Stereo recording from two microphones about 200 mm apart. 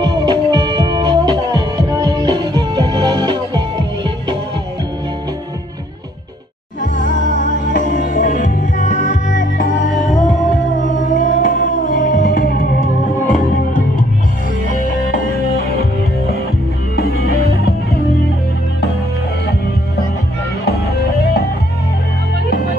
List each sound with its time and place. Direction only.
0.0 s music: 20° right (ahead or behind)
6.8 s music: 40° left (ahead or behind)